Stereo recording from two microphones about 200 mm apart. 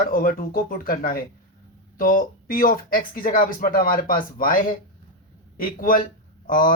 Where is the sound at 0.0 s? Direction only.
45° left (ahead or behind).